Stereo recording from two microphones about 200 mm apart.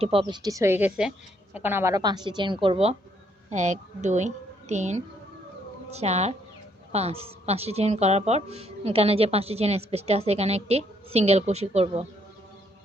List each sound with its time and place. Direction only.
0.0 s a woman's voice: 30° right (ahead or behind)